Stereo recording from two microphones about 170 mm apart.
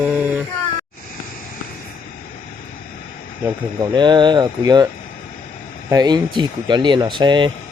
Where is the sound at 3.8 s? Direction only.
25° right (ahead or behind).